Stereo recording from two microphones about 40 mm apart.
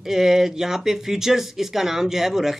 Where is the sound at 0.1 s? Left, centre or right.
Centre.